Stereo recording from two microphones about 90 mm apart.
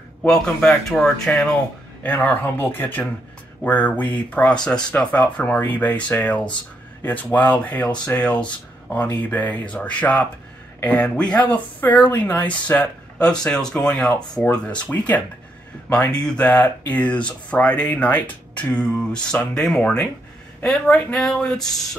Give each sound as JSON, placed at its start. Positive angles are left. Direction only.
{"t": 0.2, "sound": "speech", "side_deg": 10}
{"t": 2.0, "sound": "speech", "side_deg": 20}